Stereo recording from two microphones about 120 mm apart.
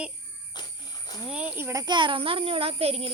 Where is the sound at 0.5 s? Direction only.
35° left (ahead or behind).